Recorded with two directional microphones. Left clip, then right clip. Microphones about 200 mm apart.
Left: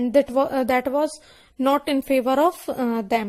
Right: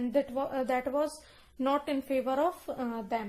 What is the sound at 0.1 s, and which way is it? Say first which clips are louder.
A woman's voice: left 12 dB; 45° left (ahead or behind).